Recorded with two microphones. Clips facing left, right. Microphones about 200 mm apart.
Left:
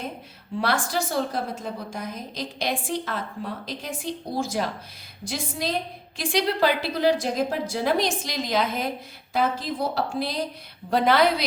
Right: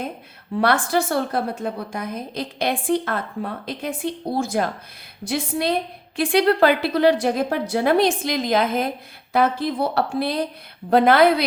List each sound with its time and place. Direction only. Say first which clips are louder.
0.6 s a woman's voice: right 6 dB; 60° right (ahead or behind)